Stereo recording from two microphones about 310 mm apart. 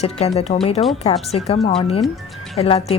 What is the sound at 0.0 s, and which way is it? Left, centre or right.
Speech, centre.